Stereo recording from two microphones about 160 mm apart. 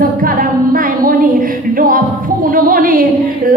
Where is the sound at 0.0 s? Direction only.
60° right (ahead or behind).